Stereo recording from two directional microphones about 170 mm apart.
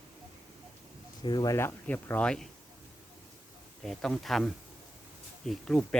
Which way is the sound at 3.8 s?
Centre (ahead or behind).